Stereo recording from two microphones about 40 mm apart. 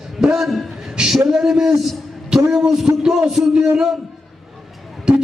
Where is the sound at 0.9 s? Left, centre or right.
Centre.